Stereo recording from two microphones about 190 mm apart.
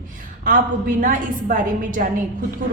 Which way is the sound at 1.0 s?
45° right (ahead or behind).